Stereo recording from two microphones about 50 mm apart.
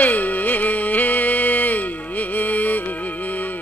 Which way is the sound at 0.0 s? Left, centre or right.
Left.